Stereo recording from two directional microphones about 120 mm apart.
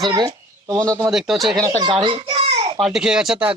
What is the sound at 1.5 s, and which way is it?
Speech, 30° right (ahead or behind).